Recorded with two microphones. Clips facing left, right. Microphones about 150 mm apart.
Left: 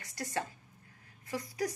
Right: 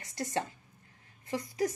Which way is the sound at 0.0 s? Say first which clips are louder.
Right 3 dB; 20° right (ahead or behind).